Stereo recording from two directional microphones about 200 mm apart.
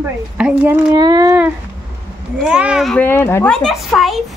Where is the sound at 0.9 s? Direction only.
20° right (ahead or behind).